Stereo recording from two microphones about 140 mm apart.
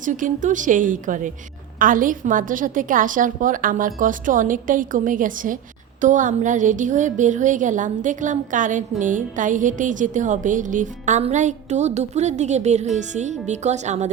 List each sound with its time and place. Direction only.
0.0 s a woman's voice: 65° right (ahead or behind)